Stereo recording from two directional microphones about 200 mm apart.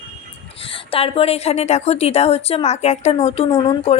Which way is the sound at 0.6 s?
25° left (ahead or behind).